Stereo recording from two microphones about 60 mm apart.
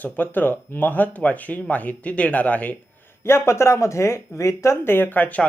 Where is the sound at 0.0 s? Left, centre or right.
Left.